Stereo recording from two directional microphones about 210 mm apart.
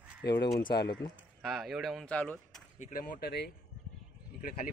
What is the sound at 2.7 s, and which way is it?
Speech, 40° left (ahead or behind).